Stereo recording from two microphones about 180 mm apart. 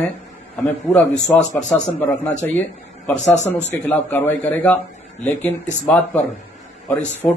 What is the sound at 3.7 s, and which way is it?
A man's voice, 10° left (ahead or behind).